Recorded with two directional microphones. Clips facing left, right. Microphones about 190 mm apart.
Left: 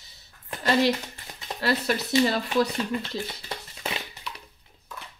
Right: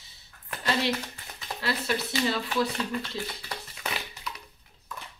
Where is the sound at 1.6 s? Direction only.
40° left (ahead or behind).